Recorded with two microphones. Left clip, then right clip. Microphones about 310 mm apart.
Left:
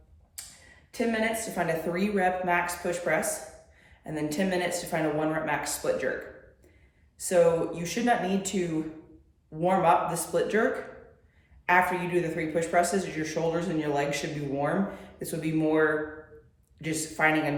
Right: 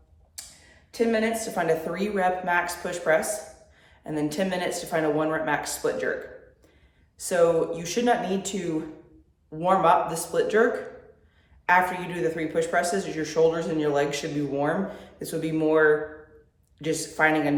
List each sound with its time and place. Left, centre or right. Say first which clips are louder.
0.9 s speech: right 4 dB; centre
7.2 s speech: right 1 dB; centre
9.6 s speech: right 3 dB; centre
11.6 s speech: right 2 dB; centre
16.8 s speech: right 3 dB; centre